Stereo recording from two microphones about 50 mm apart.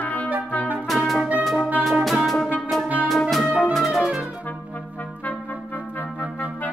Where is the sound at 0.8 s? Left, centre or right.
Centre.